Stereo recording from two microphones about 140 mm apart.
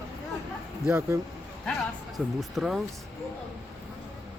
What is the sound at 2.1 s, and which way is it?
Speech, centre (ahead or behind).